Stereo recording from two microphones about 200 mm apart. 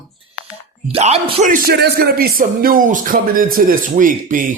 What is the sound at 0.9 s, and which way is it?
Speech, 30° right (ahead or behind).